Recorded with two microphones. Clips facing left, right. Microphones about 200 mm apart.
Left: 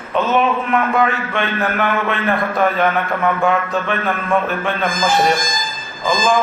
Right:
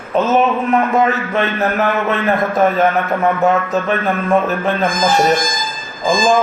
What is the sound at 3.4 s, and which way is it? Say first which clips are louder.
Speech: right 3 dB; 40° right (ahead or behind).